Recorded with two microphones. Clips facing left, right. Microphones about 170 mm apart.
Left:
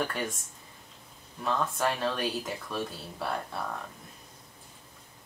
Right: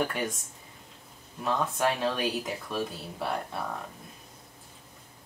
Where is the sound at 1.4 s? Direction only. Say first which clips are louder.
Right 1 dB; centre (ahead or behind).